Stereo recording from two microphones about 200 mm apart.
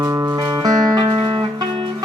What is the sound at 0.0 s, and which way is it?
Music, 15° right (ahead or behind).